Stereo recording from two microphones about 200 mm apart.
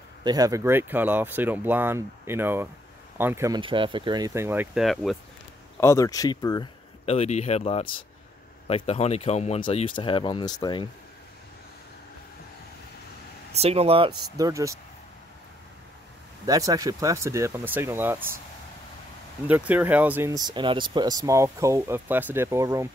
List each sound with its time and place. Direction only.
0.2 s speech: 20° right (ahead or behind); by 5.1 s centre (ahead or behind)
5.8 s speech: 15° left (ahead or behind)
7.1 s speech: 35° left (ahead or behind)
13.5 s speech: 30° right (ahead or behind)
14.3 s speech: 15° right (ahead or behind)
16.4 s speech: 15° right (ahead or behind)
19.4 s speech: 5° right (ahead or behind)